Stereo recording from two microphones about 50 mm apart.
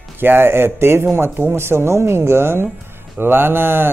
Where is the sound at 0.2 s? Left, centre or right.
Right.